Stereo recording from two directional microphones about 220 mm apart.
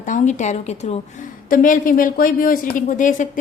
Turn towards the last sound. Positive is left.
turn(degrees=35)  # may be behind; listen again after turning